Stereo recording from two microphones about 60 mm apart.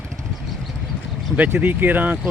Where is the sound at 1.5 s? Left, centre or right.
Right.